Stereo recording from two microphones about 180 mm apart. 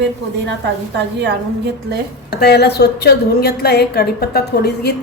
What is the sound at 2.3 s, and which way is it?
A woman's voice, 65° left (ahead or behind).